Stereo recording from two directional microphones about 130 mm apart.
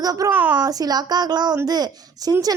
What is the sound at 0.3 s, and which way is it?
Speech, 10° right (ahead or behind).